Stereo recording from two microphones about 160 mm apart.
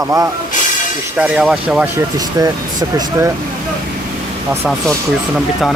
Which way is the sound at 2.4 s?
25° right (ahead or behind).